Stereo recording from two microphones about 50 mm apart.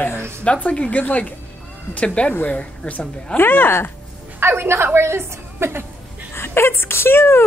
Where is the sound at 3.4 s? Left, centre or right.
Left.